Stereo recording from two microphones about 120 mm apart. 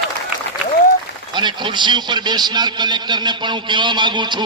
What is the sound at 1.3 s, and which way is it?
A man's voice, 40° right (ahead or behind).